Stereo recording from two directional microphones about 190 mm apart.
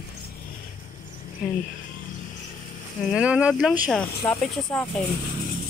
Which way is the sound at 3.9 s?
5° left (ahead or behind).